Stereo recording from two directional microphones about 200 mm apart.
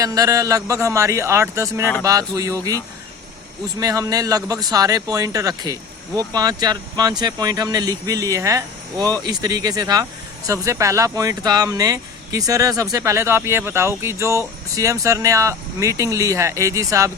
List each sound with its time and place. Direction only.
0.0 s speech: 15° right (ahead or behind)
3.8 s speech: 15° right (ahead or behind)